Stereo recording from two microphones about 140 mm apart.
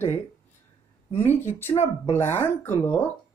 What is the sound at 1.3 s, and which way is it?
Speech, 15° left (ahead or behind).